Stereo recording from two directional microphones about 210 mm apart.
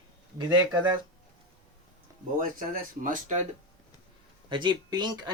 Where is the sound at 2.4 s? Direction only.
40° right (ahead or behind).